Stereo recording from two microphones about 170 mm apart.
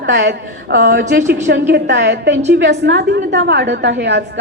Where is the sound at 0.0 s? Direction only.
90° right.